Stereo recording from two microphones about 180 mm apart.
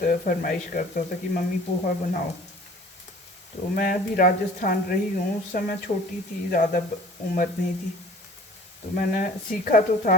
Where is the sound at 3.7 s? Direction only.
50° left (ahead or behind).